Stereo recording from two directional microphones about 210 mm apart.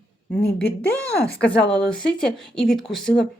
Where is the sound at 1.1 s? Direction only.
50° left (ahead or behind).